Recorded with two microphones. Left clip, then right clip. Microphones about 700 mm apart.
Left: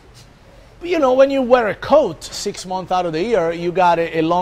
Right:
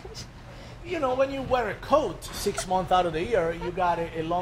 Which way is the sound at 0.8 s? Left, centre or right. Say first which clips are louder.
Left 12 dB; left.